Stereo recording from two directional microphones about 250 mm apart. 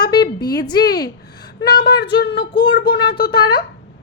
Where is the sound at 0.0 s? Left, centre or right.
Centre.